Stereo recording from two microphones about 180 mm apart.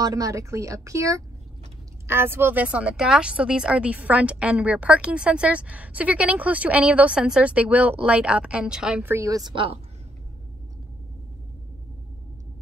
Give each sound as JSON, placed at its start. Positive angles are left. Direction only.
{"t": 0.0, "sound": "a woman's voice", "side_deg": -20}